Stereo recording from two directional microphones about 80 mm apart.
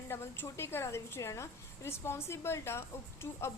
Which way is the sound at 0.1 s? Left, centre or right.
Left.